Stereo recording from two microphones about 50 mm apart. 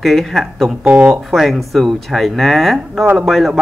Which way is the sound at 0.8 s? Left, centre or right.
Right.